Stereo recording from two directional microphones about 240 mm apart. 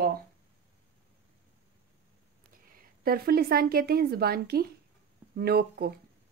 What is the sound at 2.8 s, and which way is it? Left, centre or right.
A woman's voice, right.